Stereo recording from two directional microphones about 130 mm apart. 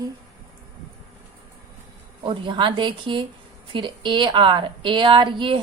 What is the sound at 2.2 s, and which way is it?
A woman's voice, 40° right (ahead or behind).